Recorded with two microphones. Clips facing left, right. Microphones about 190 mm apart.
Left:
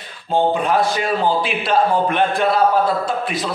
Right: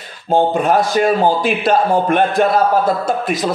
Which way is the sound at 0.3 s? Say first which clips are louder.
Right 3 dB; 45° right (ahead or behind).